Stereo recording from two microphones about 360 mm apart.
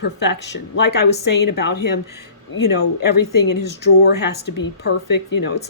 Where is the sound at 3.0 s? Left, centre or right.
Left.